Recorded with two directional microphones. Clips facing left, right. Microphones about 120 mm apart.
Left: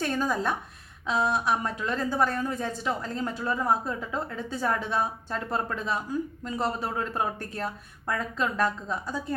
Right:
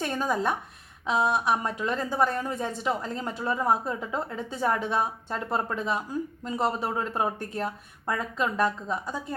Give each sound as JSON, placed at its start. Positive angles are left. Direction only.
{"t": 0.0, "sound": "speech", "side_deg": -20}